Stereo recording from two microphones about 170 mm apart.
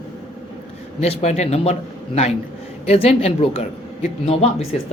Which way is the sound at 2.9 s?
35° left (ahead or behind).